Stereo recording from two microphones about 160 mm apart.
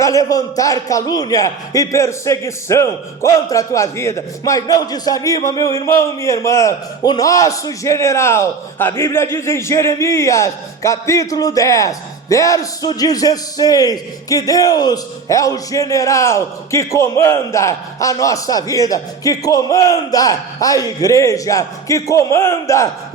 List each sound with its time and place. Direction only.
0.0 s a man's voice: 20° left (ahead or behind)